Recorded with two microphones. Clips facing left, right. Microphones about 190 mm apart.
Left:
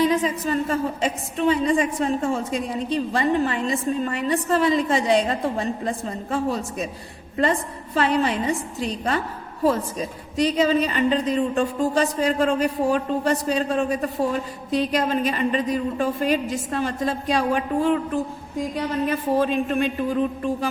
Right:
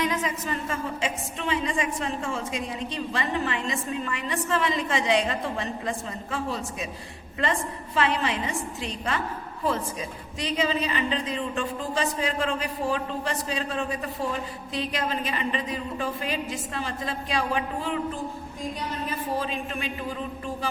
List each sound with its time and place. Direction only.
0.0 s a woman's voice: 30° left (ahead or behind)
7.9 s a woman's voice: 40° left (ahead or behind)